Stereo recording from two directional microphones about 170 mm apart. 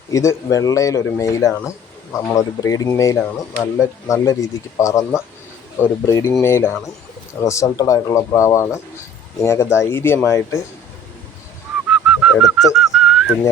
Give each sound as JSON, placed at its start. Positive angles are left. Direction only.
{"t": 0.1, "sound": "speech", "side_deg": 20}
{"t": 11.9, "sound": "bird", "side_deg": -5}